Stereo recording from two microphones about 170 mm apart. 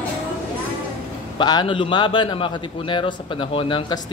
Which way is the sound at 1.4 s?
25° left (ahead or behind).